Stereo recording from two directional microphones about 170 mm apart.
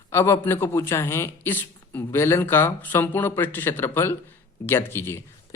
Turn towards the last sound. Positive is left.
turn(degrees=15)  # may be behind; listen again after turning